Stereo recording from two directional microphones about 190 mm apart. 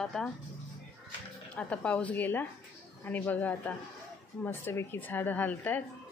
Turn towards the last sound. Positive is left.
turn(degrees=10)  # may be behind; listen again after turning